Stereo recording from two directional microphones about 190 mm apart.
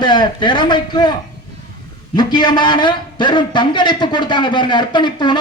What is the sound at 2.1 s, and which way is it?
A man's voice, 25° left (ahead or behind).